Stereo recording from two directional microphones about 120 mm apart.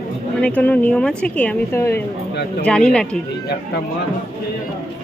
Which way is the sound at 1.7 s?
20° left (ahead or behind).